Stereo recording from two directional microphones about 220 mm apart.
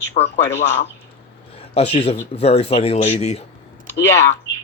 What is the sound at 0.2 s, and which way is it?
Speech, 10° left (ahead or behind).